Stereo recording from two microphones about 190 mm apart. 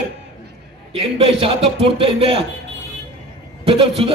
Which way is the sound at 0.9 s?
30° right (ahead or behind).